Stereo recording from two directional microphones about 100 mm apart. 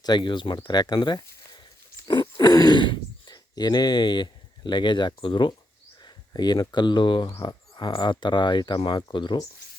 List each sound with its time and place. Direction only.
0.0 s speech: 45° left (ahead or behind)